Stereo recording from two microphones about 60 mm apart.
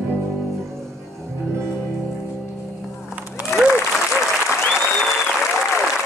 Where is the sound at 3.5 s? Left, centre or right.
Left.